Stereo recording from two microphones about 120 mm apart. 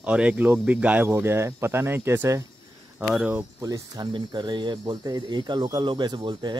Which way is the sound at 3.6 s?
30° right (ahead or behind).